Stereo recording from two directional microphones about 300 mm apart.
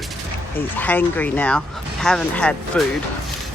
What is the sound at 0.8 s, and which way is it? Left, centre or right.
Speech, centre.